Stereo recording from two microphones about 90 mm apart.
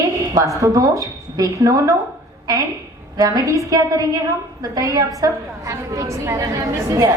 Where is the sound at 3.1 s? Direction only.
40° right (ahead or behind).